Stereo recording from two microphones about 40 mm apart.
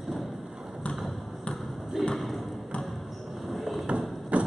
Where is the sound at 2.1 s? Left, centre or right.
Centre.